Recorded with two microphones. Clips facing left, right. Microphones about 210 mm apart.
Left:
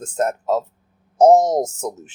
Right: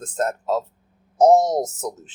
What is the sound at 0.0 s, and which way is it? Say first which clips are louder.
Speech: left 3 dB; 10° left (ahead or behind).